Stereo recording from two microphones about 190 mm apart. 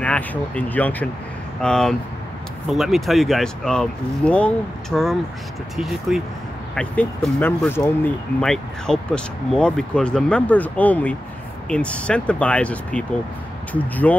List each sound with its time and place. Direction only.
0.0 s speech: 5° left (ahead or behind)